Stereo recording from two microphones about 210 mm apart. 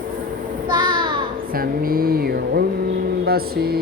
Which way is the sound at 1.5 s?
45° right (ahead or behind).